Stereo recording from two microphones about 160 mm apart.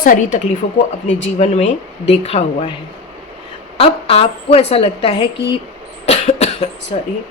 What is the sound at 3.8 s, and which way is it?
A woman's voice, 35° left (ahead or behind).